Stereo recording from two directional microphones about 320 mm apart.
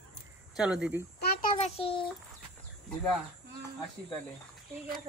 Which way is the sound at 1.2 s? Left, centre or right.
Left.